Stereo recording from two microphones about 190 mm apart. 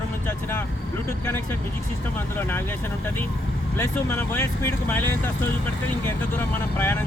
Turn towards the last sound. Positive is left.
turn(degrees=10)  # may be behind; listen again after turning